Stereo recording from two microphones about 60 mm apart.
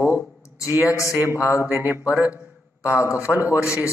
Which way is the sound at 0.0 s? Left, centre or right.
Left.